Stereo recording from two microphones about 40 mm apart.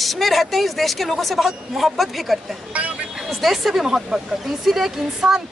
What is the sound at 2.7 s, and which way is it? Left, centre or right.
Speech, right.